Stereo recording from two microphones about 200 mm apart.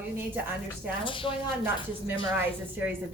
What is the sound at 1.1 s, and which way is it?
Speech, 25° left (ahead or behind).